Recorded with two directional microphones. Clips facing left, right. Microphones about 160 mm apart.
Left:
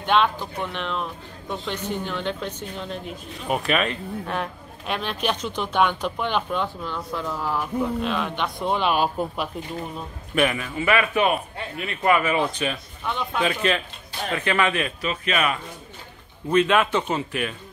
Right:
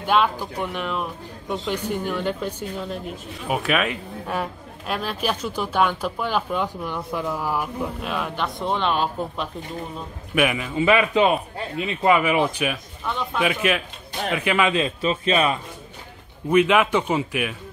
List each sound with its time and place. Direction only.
0.0 s a man's voice: 5° right (ahead or behind); by 9.5 s 10° left (ahead or behind)
10.3 s speech: 10° right (ahead or behind)
13.1 s a man's voice: centre (ahead or behind); by 15.6 s 30° right (ahead or behind)
16.4 s speech: 10° right (ahead or behind)